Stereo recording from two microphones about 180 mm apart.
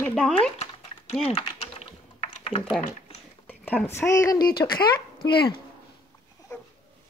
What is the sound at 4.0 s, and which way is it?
Speech, 15° left (ahead or behind).